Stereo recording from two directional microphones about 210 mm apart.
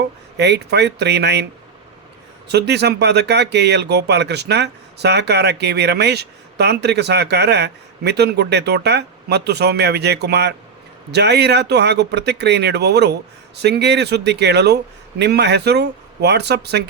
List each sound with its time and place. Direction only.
0.0 s speech: 55° right (ahead or behind)
2.5 s speech: 50° right (ahead or behind)